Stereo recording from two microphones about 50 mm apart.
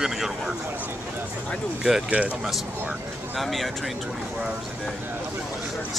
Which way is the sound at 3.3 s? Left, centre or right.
Centre.